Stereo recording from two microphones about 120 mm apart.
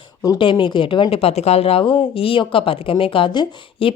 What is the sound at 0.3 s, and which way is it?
A woman's voice, 45° left (ahead or behind).